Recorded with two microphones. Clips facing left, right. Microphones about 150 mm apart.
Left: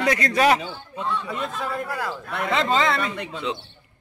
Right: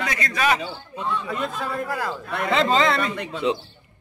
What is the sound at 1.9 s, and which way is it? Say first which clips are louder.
A man's voice: right 2 dB; centre (ahead or behind).